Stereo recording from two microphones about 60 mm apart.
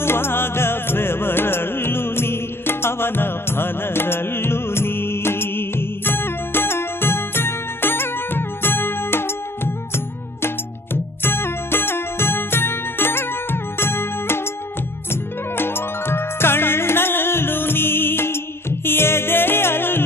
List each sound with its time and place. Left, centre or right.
0.0 s music: left
15.5 s music: left